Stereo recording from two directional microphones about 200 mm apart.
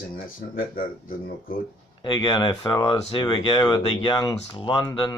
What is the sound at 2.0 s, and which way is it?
Speech, 20° left (ahead or behind).